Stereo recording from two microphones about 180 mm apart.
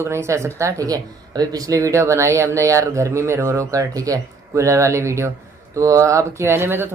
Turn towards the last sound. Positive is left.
turn(degrees=-15)  # may be behind; listen again after turning